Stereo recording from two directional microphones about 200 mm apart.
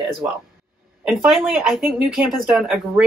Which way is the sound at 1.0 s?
Centre (ahead or behind).